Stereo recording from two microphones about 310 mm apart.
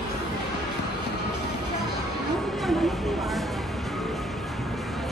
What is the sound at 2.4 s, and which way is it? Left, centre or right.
Music, centre.